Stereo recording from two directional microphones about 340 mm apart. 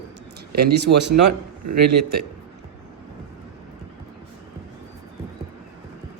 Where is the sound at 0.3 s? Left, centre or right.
Right.